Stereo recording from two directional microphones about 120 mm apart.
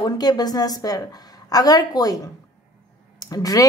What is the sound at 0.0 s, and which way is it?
Speech, 35° left (ahead or behind).